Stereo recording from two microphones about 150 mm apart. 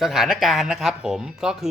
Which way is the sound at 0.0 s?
5° right (ahead or behind).